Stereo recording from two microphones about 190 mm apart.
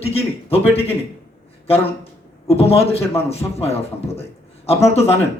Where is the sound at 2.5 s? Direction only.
30° left (ahead or behind).